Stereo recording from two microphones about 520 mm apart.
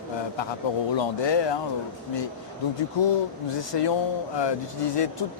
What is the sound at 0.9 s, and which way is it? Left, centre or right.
Speech, left.